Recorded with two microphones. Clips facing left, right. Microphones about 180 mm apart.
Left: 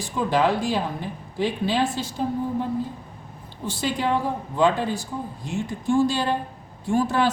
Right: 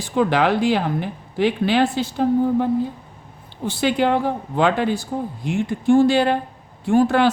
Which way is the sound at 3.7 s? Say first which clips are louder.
Right 6 dB; 70° right (ahead or behind).